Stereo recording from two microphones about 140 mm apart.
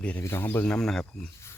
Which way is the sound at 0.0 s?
15° left (ahead or behind).